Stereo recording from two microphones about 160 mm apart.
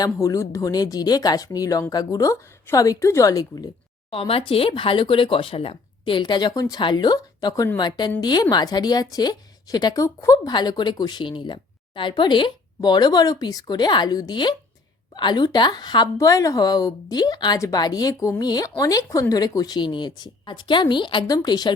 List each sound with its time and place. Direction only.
0.0 s a woman's voice: 20° left (ahead or behind)
4.1 s a woman's voice: 35° left (ahead or behind)